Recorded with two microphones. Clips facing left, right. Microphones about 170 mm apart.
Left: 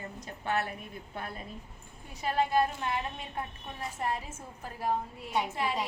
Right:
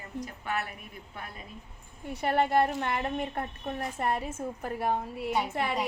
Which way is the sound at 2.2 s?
60° right (ahead or behind).